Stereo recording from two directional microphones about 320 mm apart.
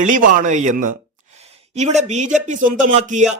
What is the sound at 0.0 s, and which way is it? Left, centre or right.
Speech, right.